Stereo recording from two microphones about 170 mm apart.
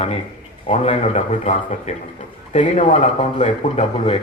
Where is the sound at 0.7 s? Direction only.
40° left (ahead or behind).